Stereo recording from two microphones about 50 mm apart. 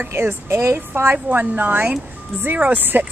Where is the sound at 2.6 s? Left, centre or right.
Right.